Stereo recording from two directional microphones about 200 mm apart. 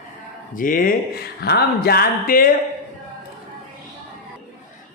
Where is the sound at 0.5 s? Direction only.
45° left (ahead or behind).